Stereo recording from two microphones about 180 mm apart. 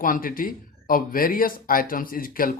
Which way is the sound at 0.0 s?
50° left (ahead or behind).